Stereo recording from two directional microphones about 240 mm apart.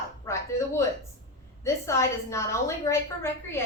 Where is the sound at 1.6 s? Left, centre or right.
Centre.